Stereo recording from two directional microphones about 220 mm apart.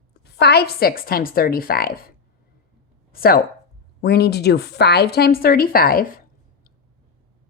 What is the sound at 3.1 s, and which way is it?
Speech, 45° left (ahead or behind).